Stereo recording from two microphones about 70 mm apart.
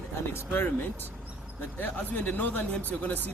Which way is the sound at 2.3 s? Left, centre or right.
Left.